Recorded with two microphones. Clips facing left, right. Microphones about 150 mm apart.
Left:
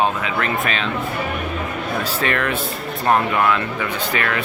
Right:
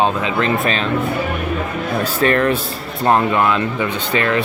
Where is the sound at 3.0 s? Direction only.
25° right (ahead or behind).